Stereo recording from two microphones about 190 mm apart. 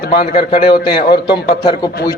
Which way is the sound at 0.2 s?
25° left (ahead or behind).